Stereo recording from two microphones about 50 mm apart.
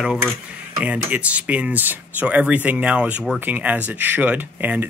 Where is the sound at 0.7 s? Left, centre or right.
Centre.